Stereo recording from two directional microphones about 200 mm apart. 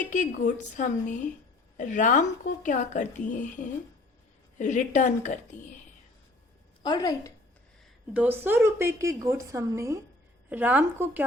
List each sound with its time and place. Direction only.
0.1 s a woman's voice: 40° left (ahead or behind)
6.8 s speech: 20° left (ahead or behind)
8.1 s a woman's voice: 10° right (ahead or behind)